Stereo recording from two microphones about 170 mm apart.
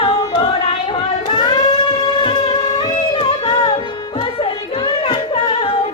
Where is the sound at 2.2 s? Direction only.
30° left (ahead or behind).